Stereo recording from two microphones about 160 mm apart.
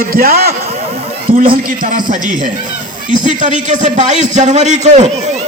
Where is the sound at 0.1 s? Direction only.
70° right (ahead or behind).